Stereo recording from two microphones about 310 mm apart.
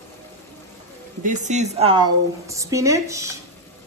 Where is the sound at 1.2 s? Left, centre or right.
Right.